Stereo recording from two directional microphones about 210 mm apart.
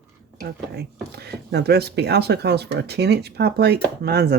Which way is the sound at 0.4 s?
50° right (ahead or behind).